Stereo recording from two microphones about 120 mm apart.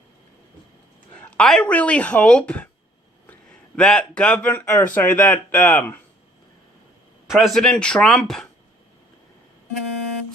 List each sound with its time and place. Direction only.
1.4 s speech: 5° left (ahead or behind)
3.8 s speech: 5° left (ahead or behind)
7.3 s speech: centre (ahead or behind)